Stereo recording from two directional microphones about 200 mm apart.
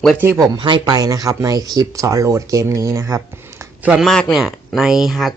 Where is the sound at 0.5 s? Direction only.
25° right (ahead or behind).